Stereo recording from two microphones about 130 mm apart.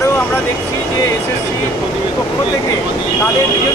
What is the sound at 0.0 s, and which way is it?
Vehicle, 25° left (ahead or behind).